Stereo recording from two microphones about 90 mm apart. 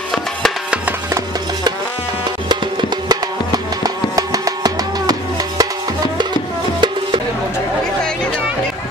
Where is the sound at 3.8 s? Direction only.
40° right (ahead or behind).